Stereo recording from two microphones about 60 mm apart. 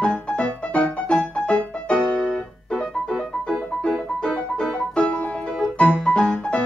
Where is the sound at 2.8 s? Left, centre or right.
Centre.